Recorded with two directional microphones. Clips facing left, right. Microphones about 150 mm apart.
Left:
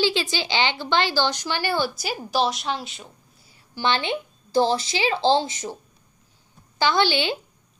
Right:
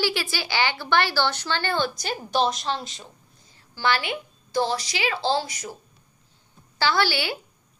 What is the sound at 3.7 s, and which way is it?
A woman's voice, 20° left (ahead or behind).